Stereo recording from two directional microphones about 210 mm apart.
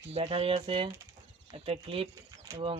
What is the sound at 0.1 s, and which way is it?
Speech, 30° right (ahead or behind).